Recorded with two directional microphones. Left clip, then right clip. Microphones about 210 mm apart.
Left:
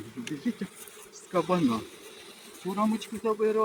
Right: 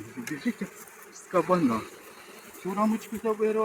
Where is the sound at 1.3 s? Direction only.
25° left (ahead or behind).